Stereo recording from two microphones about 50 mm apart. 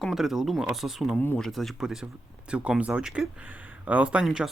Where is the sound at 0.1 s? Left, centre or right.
Centre.